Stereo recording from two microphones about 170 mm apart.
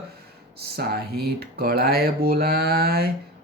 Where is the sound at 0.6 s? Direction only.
70° right (ahead or behind).